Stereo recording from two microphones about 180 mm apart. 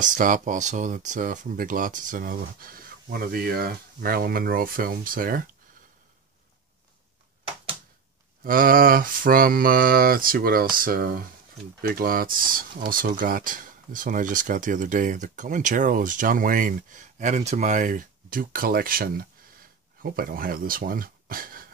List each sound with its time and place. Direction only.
0.0 s speech: 45° right (ahead or behind)
8.5 s speech: 50° right (ahead or behind)